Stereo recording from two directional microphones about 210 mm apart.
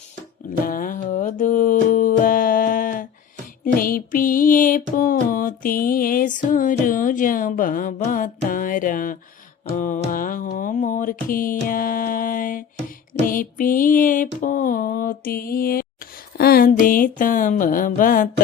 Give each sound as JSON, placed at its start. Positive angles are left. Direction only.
{"t": 0.6, "sound": "music", "side_deg": 40}
{"t": 9.7, "sound": "mantra", "side_deg": 40}
{"t": 13.2, "sound": "music", "side_deg": 40}
{"t": 14.4, "sound": "mantra", "side_deg": 40}
{"t": 16.4, "sound": "music", "side_deg": 45}